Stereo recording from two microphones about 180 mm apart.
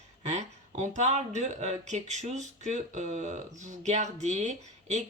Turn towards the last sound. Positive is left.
turn(degrees=-40)  # may be behind; listen again after turning